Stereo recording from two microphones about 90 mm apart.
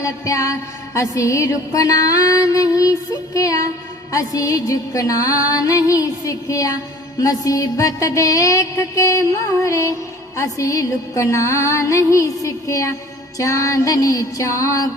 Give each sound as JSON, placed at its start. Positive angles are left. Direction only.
{"t": 0.0, "sound": "music", "side_deg": 35}